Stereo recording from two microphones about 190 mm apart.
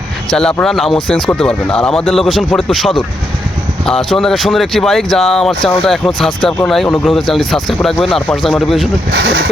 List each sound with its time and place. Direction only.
0.3 s speech: 5° left (ahead or behind)
9.1 s speech: 65° right (ahead or behind)